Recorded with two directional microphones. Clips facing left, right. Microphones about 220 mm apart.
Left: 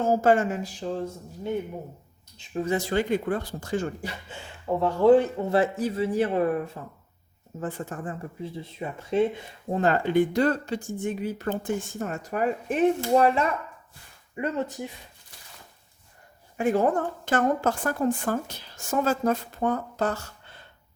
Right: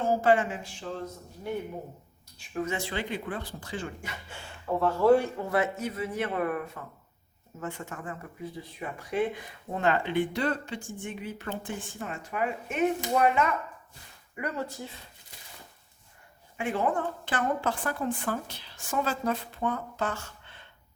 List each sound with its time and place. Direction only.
0.0 s speech: 45° left (ahead or behind)
2.4 s speech: 25° left (ahead or behind)
2.7 s a woman's voice: 45° left (ahead or behind)
4.9 s speech: 20° left (ahead or behind)
9.8 s speech: 40° left (ahead or behind)
14.3 s speech: 20° left (ahead or behind)
16.6 s a woman's voice: 40° left (ahead or behind)